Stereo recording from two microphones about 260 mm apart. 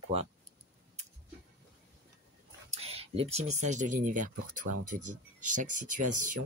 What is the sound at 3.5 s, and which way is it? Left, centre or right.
Speech, right.